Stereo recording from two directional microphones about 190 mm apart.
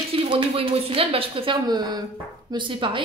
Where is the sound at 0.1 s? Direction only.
30° right (ahead or behind).